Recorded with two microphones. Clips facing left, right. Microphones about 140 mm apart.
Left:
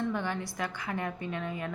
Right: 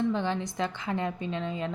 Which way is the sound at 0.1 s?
25° right (ahead or behind).